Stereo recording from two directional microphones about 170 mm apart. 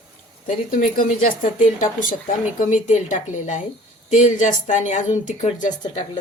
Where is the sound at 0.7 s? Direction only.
55° left (ahead or behind).